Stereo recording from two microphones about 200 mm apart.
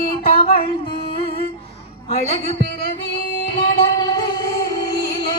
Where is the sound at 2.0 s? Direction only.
30° left (ahead or behind).